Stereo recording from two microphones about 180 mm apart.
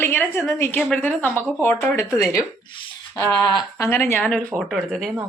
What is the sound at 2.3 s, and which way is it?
Speech, 25° left (ahead or behind).